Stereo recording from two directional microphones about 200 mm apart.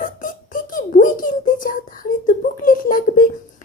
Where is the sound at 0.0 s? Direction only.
40° left (ahead or behind).